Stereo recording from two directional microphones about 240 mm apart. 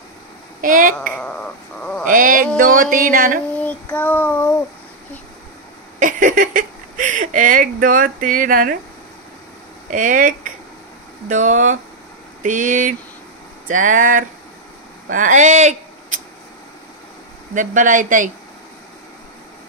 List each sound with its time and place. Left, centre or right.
0.6 s speech: right
1.1 s bird: centre
2.0 s speech: right
3.5 s child singing: centre
5.9 s speech: right
9.8 s speech: right
17.6 s speech: right